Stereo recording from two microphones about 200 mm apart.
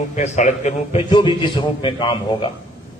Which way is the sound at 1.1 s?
25° left (ahead or behind).